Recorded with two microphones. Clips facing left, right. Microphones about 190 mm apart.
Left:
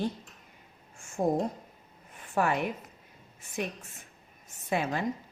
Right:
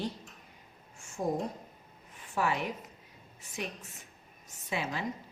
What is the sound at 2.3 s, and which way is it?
Speech, 55° left (ahead or behind).